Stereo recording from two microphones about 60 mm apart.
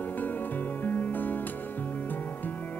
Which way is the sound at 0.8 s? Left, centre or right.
Left.